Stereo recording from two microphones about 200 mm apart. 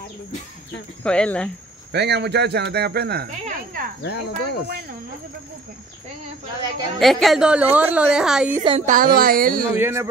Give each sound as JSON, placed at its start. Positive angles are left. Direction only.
{"t": 1.0, "sound": "a woman's voice", "side_deg": 5}
{"t": 1.9, "sound": "speech", "side_deg": -55}
{"t": 3.3, "sound": "a sound", "side_deg": -40}
{"t": 4.0, "sound": "speech", "side_deg": 55}
{"t": 7.0, "sound": "a woman's voice", "side_deg": 0}
{"t": 8.6, "sound": "speech", "side_deg": -35}
{"t": 9.8, "sound": "speech", "side_deg": -10}